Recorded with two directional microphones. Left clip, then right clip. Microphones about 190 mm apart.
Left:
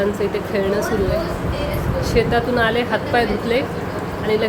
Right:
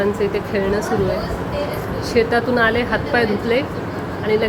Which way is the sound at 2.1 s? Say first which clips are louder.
Right 2 dB; 10° right (ahead or behind).